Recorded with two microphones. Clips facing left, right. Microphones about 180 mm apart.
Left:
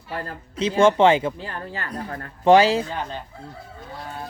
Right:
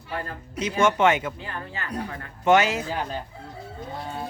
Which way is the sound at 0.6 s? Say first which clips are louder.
Left 4 dB; 30° left (ahead or behind).